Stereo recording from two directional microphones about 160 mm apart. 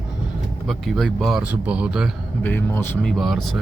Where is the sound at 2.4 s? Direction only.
10° left (ahead or behind).